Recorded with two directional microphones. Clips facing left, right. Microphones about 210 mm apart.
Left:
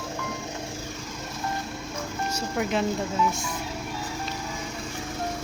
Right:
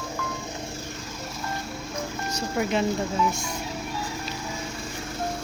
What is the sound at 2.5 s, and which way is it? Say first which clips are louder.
Speech: right 1 dB; centre (ahead or behind).